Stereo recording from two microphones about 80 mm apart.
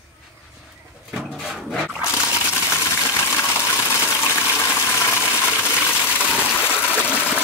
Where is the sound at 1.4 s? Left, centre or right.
Centre.